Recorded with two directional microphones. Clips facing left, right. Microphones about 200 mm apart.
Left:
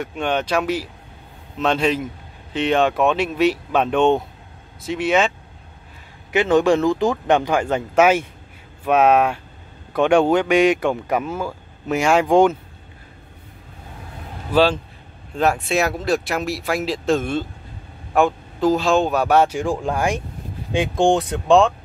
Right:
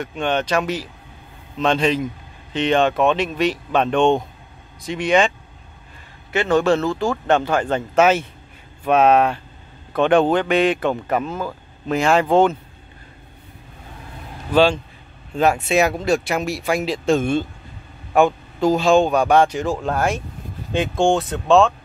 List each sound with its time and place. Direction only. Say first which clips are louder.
0.0 s speech: right 1 dB; 5° left (ahead or behind)
6.3 s speech: left 1 dB; 15° left (ahead or behind)
14.5 s speech: right 1 dB; 5° left (ahead or behind)